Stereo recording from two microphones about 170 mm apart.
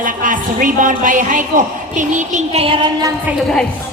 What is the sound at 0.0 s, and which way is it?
A woman's voice, 50° right (ahead or behind).